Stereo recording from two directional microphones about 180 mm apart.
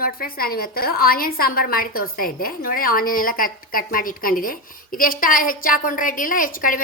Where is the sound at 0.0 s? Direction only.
55° left (ahead or behind).